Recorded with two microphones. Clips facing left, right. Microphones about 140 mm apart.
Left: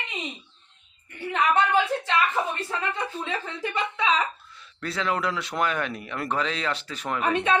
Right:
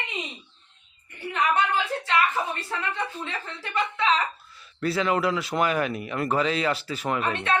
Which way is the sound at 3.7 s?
20° left (ahead or behind).